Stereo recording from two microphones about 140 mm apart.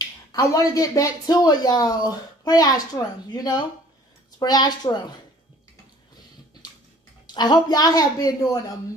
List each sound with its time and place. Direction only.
0.0 s speech: 25° left (ahead or behind)
7.3 s speech: 30° left (ahead or behind)